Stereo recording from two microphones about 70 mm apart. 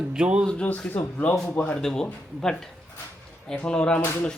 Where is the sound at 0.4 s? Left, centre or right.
Centre.